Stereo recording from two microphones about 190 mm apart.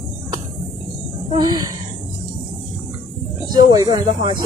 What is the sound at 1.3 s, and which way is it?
Speech, 20° right (ahead or behind).